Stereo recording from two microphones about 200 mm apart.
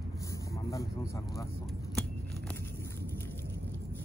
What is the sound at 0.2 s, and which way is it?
Vehicle, 15° left (ahead or behind).